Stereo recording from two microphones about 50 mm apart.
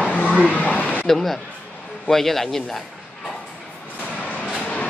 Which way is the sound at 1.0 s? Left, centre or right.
Centre.